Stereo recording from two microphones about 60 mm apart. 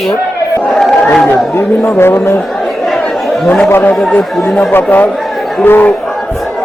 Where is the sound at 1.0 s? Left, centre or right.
Centre.